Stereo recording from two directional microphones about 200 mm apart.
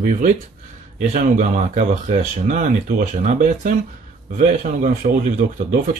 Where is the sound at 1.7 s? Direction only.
35° right (ahead or behind).